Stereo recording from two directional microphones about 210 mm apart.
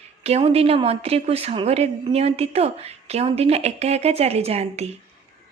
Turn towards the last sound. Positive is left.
turn(degrees=-30)  # may be behind; listen again after turning